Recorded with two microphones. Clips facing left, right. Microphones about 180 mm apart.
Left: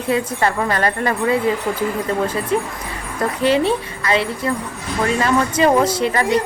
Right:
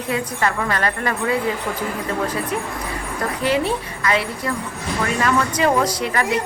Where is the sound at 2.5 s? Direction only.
30° left (ahead or behind).